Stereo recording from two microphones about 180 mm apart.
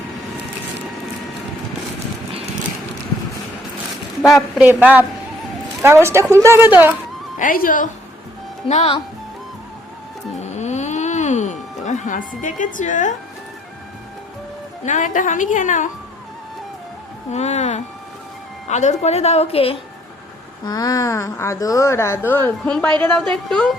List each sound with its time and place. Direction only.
4.3 s a woman's voice: centre (ahead or behind)
7.3 s a woman's voice: 50° left (ahead or behind)
8.6 s a woman's voice: 35° left (ahead or behind)
10.6 s music: 40° left (ahead or behind)
14.8 s a woman's voice: 45° left (ahead or behind)
17.3 s a woman's voice: 40° left (ahead or behind)
20.7 s speech: 20° left (ahead or behind); by 23.7 s 5° left (ahead or behind)